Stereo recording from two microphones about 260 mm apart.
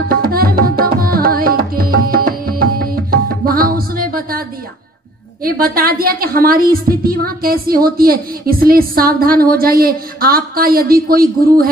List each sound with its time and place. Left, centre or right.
0.1 s tabla: right
5.4 s a woman's voice: right